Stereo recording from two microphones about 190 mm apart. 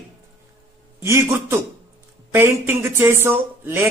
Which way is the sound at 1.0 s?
15° right (ahead or behind).